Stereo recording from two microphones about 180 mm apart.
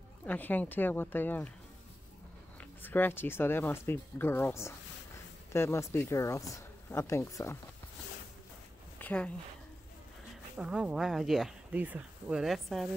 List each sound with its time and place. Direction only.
0.2 s speech: 10° left (ahead or behind)
2.8 s speech: 10° left (ahead or behind)
8.9 s a sound: 10° left (ahead or behind)
10.6 s speech: 5° right (ahead or behind)